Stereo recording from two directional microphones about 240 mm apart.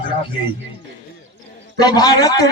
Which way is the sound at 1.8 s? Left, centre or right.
Centre.